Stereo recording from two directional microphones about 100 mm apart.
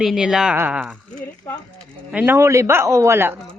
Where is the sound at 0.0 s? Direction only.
5° right (ahead or behind).